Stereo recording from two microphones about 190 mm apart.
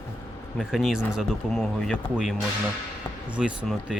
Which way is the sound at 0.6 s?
Centre (ahead or behind).